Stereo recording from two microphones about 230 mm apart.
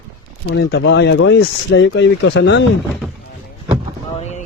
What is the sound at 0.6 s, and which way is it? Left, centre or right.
Speech, left.